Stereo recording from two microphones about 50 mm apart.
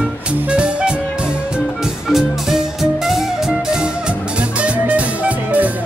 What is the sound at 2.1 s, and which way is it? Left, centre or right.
Music, centre.